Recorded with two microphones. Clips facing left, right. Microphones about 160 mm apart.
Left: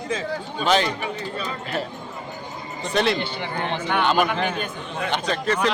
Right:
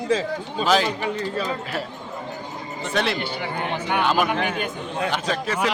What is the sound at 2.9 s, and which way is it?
A man's voice, centre (ahead or behind).